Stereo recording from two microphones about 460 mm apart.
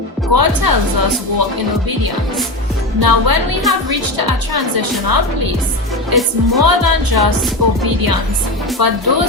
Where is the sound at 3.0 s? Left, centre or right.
Right.